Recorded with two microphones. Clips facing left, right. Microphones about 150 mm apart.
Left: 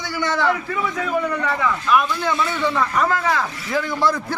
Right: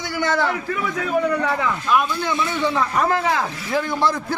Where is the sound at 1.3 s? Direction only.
35° right (ahead or behind).